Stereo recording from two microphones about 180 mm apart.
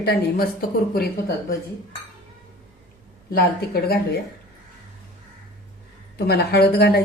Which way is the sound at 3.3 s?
55° left (ahead or behind).